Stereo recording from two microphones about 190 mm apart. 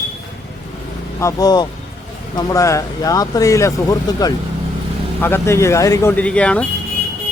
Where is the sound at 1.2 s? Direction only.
20° left (ahead or behind).